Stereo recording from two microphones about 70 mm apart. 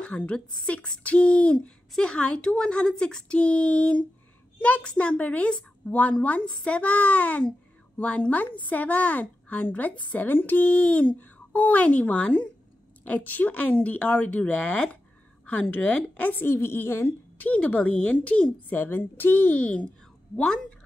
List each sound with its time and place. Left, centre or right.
0.0 s a woman's voice: centre
16.3 s a woman's voice: left
18.8 s a woman's voice: left; by 20.6 s centre